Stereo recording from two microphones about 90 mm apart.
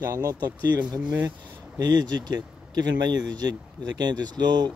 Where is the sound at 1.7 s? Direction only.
50° right (ahead or behind).